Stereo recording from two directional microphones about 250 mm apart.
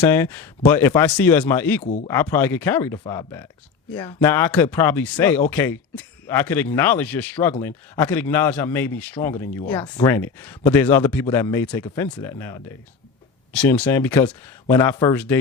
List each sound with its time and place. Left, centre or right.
0.0 s a man's voice: centre
1.8 s speech: left
2.0 s a man's voice: centre